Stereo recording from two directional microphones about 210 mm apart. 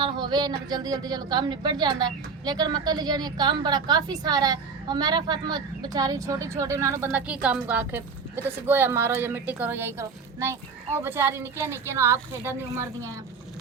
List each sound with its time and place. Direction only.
0.0 s a woman's voice: 20° right (ahead or behind)